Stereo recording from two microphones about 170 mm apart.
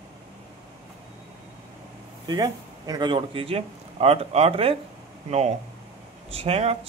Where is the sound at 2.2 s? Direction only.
25° right (ahead or behind).